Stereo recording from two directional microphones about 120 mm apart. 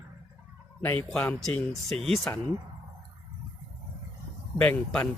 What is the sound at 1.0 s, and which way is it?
Speech, 5° left (ahead or behind).